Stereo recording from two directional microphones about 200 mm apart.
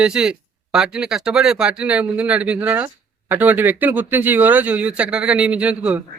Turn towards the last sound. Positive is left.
turn(degrees=-5)  # may be behind; listen again after turning